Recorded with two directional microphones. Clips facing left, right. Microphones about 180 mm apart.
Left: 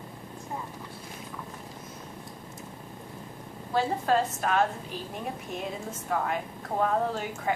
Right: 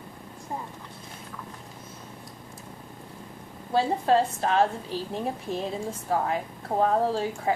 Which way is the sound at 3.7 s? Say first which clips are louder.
Right 3 dB; 30° right (ahead or behind).